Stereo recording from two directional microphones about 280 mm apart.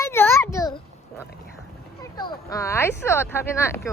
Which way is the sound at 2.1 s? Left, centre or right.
Centre.